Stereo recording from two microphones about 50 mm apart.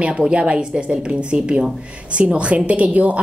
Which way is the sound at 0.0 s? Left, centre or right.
Right.